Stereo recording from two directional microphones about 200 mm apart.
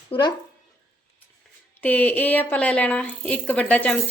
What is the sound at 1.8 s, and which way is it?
Speech, 10° left (ahead or behind).